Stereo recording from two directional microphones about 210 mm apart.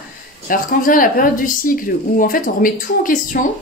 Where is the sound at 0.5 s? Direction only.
40° left (ahead or behind).